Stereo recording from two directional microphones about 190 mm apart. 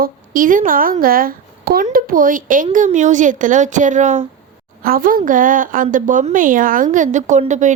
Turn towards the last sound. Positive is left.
turn(degrees=-40)  # may be behind; listen again after turning